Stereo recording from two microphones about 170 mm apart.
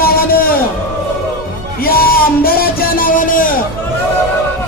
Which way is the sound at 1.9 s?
60° left (ahead or behind).